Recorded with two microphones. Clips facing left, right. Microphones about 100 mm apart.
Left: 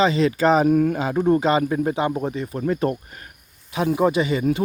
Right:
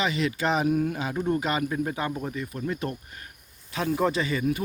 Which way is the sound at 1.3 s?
30° left (ahead or behind).